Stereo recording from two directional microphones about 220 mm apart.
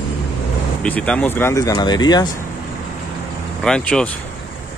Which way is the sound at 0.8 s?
5° left (ahead or behind).